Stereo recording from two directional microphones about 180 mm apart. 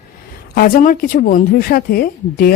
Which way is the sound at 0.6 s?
50° left (ahead or behind).